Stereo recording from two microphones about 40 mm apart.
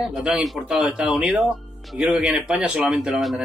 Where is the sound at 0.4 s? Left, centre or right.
Centre.